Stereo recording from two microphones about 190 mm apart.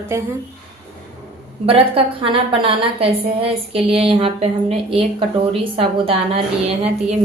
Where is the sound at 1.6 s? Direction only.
30° right (ahead or behind).